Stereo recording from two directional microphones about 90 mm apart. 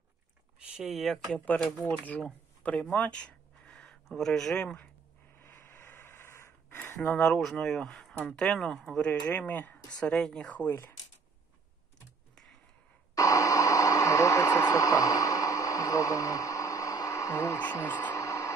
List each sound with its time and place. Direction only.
0.8 s speech: centre (ahead or behind)
1.3 s speech: 20° left (ahead or behind)
5.3 s a sound: 25° left (ahead or behind)
6.9 s speech: 20° left (ahead or behind)
7.5 s speech: 5° left (ahead or behind)
10.6 s speech: 25° left (ahead or behind)
13.1 s radio: 40° left (ahead or behind); by 18.1 s 20° left (ahead or behind)
18.1 s a sound: 35° left (ahead or behind)